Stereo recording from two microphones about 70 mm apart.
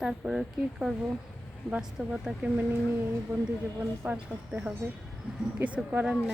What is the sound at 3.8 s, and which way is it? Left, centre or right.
Speech, centre.